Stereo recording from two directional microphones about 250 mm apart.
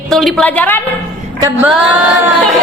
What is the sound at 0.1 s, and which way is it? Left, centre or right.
Speech, centre.